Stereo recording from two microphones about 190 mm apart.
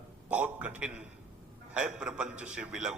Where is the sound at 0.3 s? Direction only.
10° right (ahead or behind).